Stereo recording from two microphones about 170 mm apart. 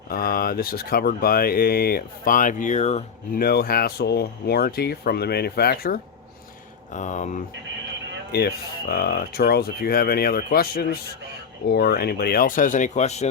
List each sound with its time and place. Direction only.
0.1 s speech: 60° left (ahead or behind); by 3.0 s 40° left (ahead or behind)
3.3 s speech: 65° left (ahead or behind)
6.9 s speech: 45° left (ahead or behind)
8.3 s speech: 70° left (ahead or behind); by 13.2 s 40° left (ahead or behind)